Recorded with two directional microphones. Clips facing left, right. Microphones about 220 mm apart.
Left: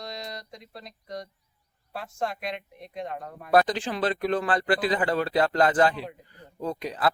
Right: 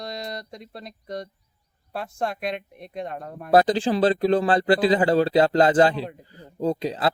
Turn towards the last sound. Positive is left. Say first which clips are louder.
# right 4 dB
turn(degrees=-25)  # may be behind; listen again after turning